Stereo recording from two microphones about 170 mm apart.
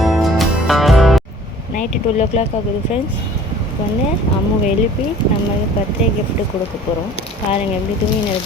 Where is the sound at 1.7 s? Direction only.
40° left (ahead or behind).